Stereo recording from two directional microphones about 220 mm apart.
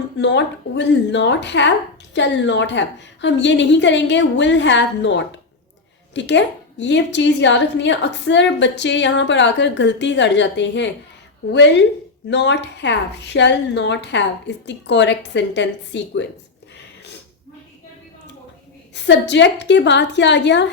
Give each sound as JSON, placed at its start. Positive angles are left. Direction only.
{"t": 0.2, "sound": "a woman's voice", "side_deg": 55}
{"t": 19.0, "sound": "a woman's voice", "side_deg": 50}